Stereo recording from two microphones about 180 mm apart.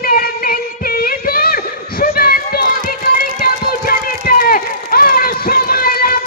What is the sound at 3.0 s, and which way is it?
Music, 55° left (ahead or behind).